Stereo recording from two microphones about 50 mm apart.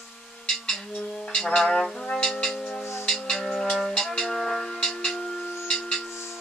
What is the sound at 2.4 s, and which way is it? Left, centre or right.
Music, centre.